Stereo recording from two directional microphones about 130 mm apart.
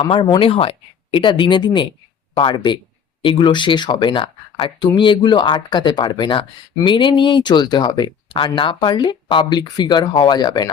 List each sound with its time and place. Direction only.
0.0 s speech: 40° left (ahead or behind)